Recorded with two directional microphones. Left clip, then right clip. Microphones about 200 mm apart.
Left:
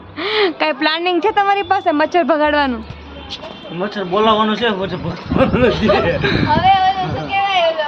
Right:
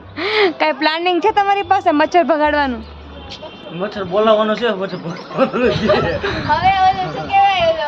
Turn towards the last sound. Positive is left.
turn(degrees=10)  # may be behind; listen again after turning